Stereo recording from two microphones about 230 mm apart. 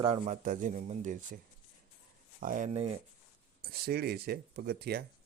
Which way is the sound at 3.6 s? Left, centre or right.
Right.